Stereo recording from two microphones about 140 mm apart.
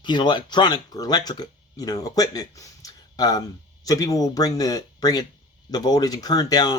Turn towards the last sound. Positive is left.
turn(degrees=30)  # may be behind; listen again after turning